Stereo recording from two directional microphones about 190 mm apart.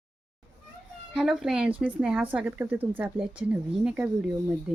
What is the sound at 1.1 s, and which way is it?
Speech, 5° right (ahead or behind).